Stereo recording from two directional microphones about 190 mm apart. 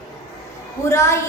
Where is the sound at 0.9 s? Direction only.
15° left (ahead or behind).